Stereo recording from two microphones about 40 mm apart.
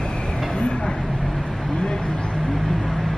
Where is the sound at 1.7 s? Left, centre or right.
Centre.